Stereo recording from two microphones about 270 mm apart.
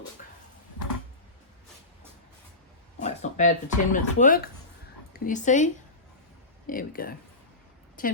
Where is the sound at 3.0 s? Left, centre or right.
Left.